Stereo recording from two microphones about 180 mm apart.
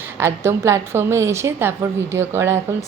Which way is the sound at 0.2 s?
15° right (ahead or behind).